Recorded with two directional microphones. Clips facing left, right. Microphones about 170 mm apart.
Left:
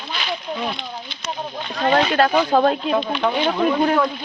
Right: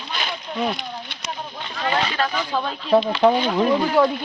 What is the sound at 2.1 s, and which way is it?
Speech, 65° left (ahead or behind).